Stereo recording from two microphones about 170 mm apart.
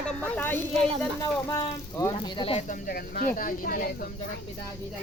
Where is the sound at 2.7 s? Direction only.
60° left (ahead or behind).